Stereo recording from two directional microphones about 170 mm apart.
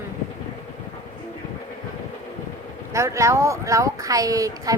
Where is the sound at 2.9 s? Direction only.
15° right (ahead or behind).